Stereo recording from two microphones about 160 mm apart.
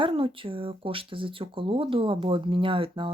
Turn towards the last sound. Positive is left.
turn(degrees=-35)  # may be behind; listen again after turning